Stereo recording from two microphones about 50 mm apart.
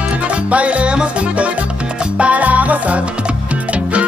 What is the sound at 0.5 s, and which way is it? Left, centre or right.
Music, right.